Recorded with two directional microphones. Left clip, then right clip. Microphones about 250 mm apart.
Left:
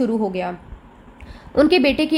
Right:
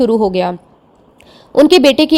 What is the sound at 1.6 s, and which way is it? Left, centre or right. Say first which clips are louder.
Speech: right 8 dB; right.